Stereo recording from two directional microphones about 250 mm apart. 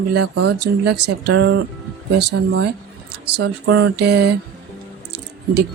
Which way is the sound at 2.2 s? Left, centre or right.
Right.